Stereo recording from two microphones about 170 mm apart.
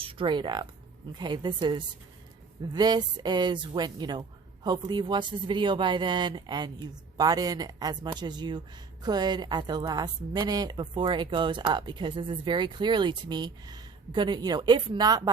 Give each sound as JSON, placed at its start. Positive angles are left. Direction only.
{"t": 0.0, "sound": "a woman's voice", "side_deg": -30}